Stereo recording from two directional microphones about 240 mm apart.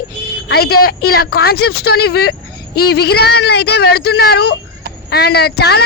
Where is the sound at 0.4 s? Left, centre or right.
Left.